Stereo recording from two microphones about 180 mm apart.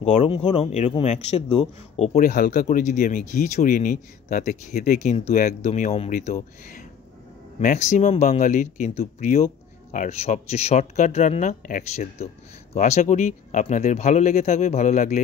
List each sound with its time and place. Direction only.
0.0 s a man's voice: 35° left (ahead or behind)